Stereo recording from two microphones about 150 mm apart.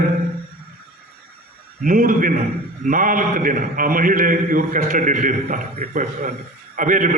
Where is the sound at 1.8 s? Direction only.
65° right (ahead or behind).